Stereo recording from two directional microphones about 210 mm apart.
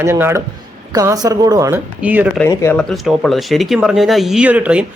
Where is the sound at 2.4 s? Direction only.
10° left (ahead or behind).